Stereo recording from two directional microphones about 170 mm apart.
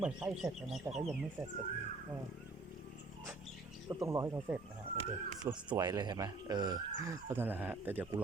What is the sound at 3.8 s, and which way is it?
Speech, 15° right (ahead or behind).